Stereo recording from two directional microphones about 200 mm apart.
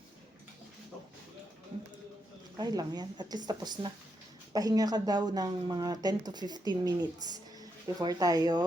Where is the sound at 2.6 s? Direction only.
20° right (ahead or behind).